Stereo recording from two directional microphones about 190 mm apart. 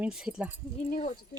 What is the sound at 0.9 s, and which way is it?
Speech, 40° left (ahead or behind).